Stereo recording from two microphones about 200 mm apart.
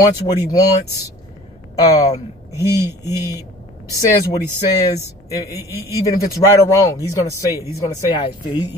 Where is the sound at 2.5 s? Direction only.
15° right (ahead or behind).